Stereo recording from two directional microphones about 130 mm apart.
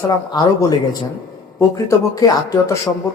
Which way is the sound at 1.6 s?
25° left (ahead or behind).